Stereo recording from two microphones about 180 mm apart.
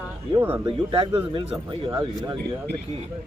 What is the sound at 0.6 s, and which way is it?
Speech, 30° right (ahead or behind).